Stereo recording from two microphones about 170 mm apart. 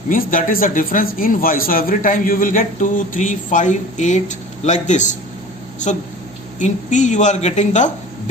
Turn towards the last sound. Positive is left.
turn(degrees=45)  # may be behind; listen again after turning